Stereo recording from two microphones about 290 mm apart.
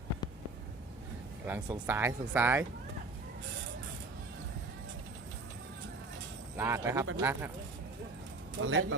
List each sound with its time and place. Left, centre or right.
1.5 s speech: centre
6.6 s speech: centre
8.6 s speech: right